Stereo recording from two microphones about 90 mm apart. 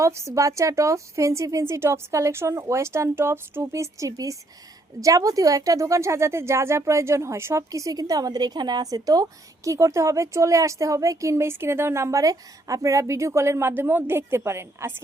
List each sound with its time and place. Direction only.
0.0 s speech: 30° right (ahead or behind)